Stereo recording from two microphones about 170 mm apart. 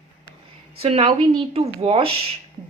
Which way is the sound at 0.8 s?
35° right (ahead or behind).